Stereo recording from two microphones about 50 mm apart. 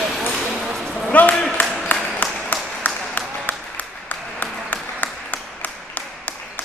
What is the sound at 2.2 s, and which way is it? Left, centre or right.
Applause, left.